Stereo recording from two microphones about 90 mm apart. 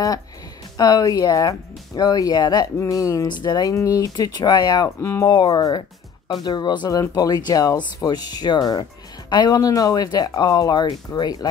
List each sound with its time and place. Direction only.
0.7 s speech: 45° left (ahead or behind)
3.3 s speech: 55° left (ahead or behind)
3.7 s speech: 40° left (ahead or behind)
4.8 s speech: 25° left (ahead or behind)
5.2 s speech: 50° left (ahead or behind)